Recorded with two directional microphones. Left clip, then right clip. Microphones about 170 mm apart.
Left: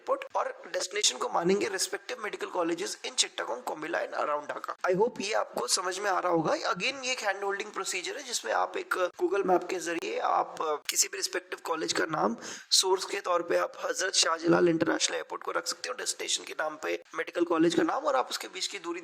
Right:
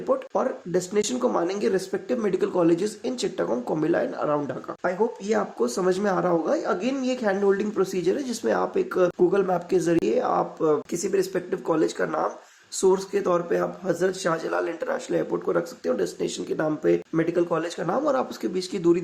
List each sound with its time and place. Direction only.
0.1 s a man's voice: 50° left (ahead or behind)
4.8 s a man's voice: 50° left (ahead or behind)
17.2 s speech: 55° left (ahead or behind); by 19.0 s 25° left (ahead or behind)